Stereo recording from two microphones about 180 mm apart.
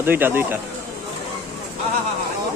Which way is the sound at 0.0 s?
10° right (ahead or behind).